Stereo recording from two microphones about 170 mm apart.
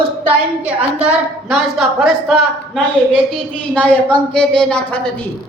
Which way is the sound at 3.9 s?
10° left (ahead or behind).